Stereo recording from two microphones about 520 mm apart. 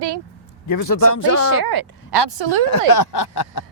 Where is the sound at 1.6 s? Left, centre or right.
Right.